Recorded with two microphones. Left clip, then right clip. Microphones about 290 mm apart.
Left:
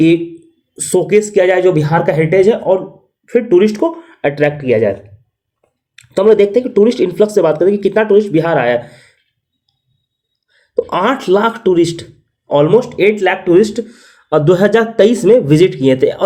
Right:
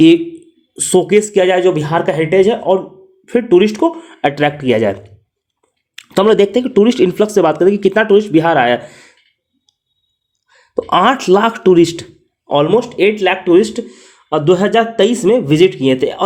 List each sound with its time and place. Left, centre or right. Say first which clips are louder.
0.7 s speech: even; right
6.0 s speech: left 1 dB; right
10.5 s speech: right 2 dB; right